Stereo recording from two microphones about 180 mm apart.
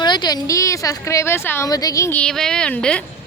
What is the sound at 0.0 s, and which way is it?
A woman's voice, 25° left (ahead or behind).